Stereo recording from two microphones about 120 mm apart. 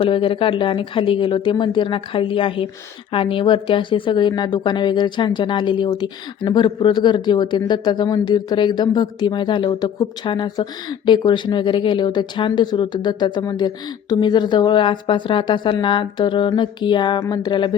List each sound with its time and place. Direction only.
0.0 s speech: 45° left (ahead or behind)